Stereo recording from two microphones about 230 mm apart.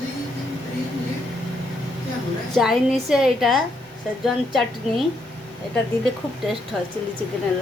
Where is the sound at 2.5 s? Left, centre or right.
Centre.